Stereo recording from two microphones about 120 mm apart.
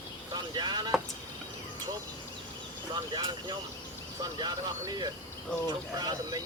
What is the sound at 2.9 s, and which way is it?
Speech, 40° right (ahead or behind).